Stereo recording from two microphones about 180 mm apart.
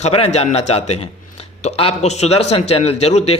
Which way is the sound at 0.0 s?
35° left (ahead or behind).